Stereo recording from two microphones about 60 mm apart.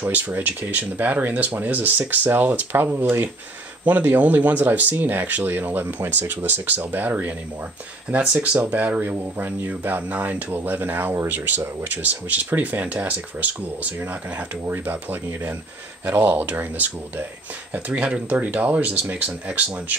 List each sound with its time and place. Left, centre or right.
0.0 s speech: right
8.4 s speech: right
14.6 s speech: right
17.9 s speech: centre